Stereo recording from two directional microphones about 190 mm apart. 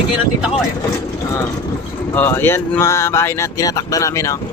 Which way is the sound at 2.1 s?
10° left (ahead or behind).